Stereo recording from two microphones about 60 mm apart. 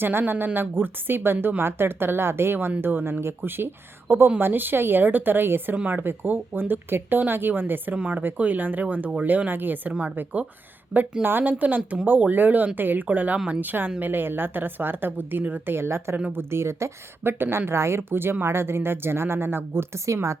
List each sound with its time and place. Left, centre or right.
0.0 s a woman's voice: right
5.7 s speech: right
6.0 s a woman's voice: right
7.9 s speech: centre
11.2 s a woman's voice: right